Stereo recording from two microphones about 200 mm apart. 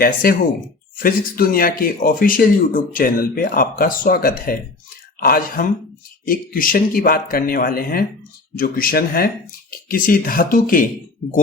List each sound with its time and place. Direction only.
0.0 s speech: 50° left (ahead or behind)